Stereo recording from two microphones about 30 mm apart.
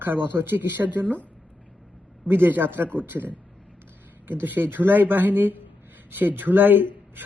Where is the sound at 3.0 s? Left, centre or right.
Right.